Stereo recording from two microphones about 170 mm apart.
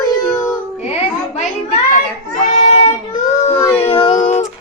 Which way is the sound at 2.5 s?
40° left (ahead or behind).